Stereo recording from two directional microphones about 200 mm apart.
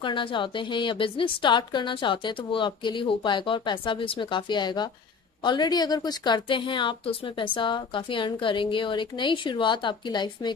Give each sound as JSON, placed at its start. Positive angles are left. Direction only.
{"t": 0.0, "sound": "a woman's voice", "side_deg": 25}